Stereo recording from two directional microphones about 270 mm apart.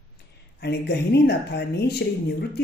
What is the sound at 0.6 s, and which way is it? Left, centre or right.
Speech, left.